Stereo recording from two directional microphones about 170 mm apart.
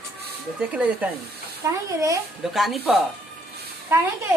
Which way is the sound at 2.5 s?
Centre (ahead or behind).